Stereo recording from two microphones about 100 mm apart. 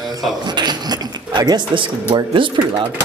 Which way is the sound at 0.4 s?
45° right (ahead or behind).